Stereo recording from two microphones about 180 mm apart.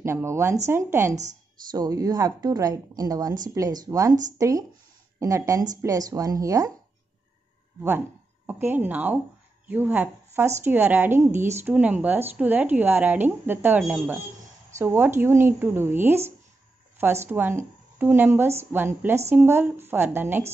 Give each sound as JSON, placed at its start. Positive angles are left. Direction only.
{"t": 0.0, "sound": "a woman's voice", "side_deg": -15}
{"t": 8.5, "sound": "speech", "side_deg": -10}